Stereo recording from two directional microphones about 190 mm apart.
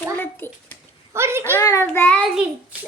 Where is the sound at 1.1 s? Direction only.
15° right (ahead or behind).